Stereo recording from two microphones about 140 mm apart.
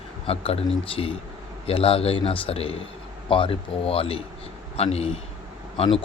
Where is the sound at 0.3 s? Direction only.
45° left (ahead or behind).